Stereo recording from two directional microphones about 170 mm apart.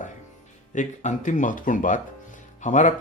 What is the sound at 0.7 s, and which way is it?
Speech, 45° left (ahead or behind).